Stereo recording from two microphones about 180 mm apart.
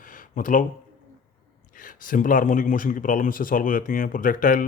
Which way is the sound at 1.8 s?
50° left (ahead or behind).